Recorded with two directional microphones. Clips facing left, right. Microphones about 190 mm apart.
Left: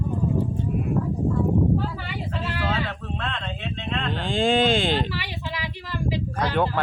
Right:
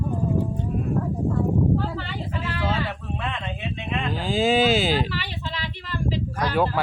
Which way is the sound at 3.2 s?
10° right (ahead or behind).